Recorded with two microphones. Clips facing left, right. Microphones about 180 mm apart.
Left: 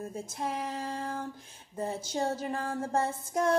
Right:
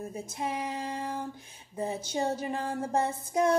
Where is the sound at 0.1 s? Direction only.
15° right (ahead or behind).